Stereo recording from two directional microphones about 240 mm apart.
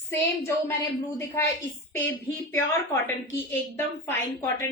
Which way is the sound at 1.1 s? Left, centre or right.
Centre.